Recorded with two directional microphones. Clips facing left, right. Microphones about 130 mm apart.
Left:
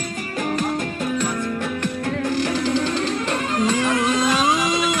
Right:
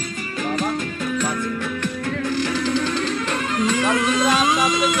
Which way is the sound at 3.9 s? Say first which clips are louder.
Even; 40° left (ahead or behind).